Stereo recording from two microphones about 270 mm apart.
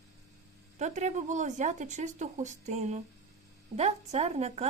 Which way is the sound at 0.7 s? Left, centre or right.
Right.